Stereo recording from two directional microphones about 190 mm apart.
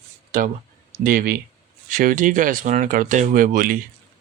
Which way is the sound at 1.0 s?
50° right (ahead or behind).